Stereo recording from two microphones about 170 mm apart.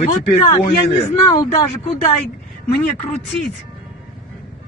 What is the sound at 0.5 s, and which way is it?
Speech, 35° left (ahead or behind).